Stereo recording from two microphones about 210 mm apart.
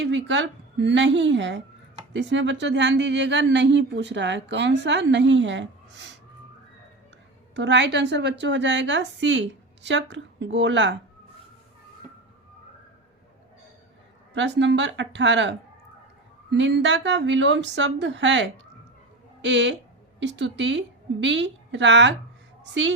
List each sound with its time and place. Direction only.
0.0 s speech: 60° right (ahead or behind)
7.5 s speech: 55° right (ahead or behind)
14.3 s speech: 60° right (ahead or behind)